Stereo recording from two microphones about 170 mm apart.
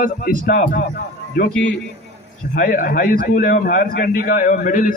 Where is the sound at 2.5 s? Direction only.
50° left (ahead or behind).